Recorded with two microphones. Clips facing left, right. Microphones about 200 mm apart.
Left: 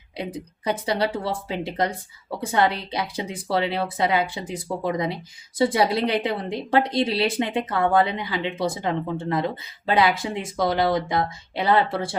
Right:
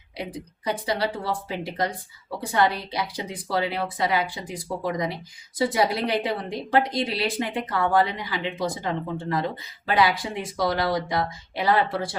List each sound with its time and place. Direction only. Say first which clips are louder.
0.2 s a woman's voice: left 3 dB; 25° left (ahead or behind)